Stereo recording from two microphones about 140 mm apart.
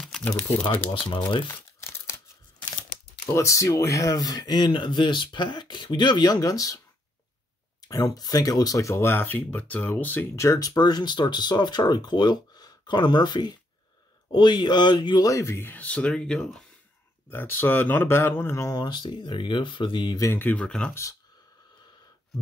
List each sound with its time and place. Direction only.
0.0 s a sound: 5° left (ahead or behind)
0.4 s speech: 5° left (ahead or behind)
1.5 s crumpling: 20° left (ahead or behind)
3.3 s speech: 20° left (ahead or behind)
7.8 s speech: 25° left (ahead or behind); by 16.6 s 5° left (ahead or behind)
17.3 s speech: 15° left (ahead or behind)
20.9 s speech: 20° left (ahead or behind)